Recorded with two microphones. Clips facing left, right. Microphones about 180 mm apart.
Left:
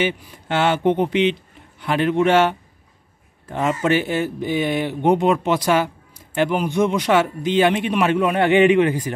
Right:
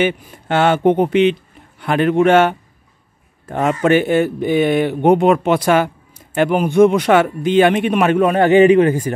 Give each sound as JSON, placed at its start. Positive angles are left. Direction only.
{"t": 0.0, "sound": "a man's voice", "side_deg": -50}